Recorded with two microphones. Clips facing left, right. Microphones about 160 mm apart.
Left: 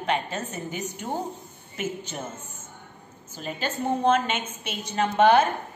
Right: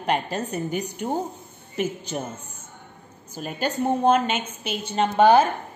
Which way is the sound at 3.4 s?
40° right (ahead or behind).